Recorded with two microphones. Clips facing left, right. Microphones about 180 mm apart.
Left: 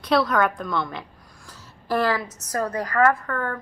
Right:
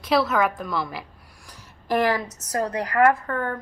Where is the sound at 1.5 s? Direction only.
15° right (ahead or behind).